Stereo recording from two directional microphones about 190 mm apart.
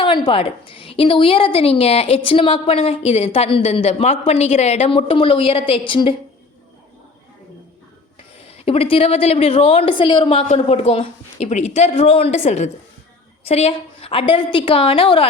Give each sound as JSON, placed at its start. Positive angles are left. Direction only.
{"t": 0.0, "sound": "a woman's voice", "side_deg": 25}
{"t": 8.6, "sound": "a woman's voice", "side_deg": 30}